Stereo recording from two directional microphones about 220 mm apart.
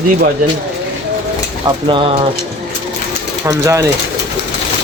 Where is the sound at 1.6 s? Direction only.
20° right (ahead or behind).